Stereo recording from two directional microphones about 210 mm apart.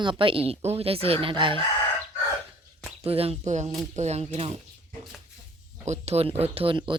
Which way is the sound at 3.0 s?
30° right (ahead or behind).